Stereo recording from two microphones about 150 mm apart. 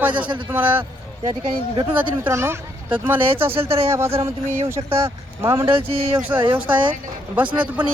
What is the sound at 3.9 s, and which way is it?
Speech, 15° right (ahead or behind).